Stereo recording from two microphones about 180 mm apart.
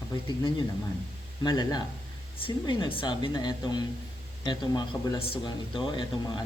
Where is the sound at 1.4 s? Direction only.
20° left (ahead or behind).